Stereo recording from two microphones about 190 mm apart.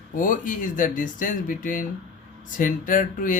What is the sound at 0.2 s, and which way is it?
Speech, 45° left (ahead or behind).